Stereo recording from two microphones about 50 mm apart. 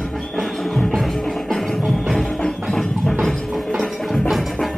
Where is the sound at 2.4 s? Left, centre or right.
Centre.